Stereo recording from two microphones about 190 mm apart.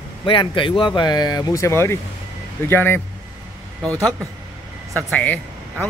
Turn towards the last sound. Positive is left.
turn(degrees=10)  # may be behind; listen again after turning